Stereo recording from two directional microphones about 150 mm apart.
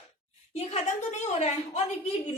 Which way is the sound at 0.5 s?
45° left (ahead or behind).